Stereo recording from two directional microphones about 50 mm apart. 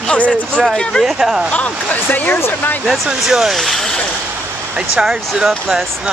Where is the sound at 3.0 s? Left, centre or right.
Centre.